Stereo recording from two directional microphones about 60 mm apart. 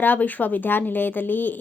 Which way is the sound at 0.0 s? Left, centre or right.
Left.